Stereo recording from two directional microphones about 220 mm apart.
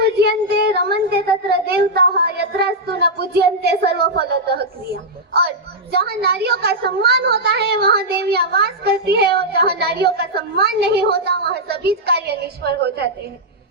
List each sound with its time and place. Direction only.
0.0 s a child's voice: 50° right (ahead or behind)